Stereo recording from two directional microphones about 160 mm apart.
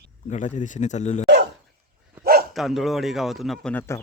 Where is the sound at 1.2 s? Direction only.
90° right.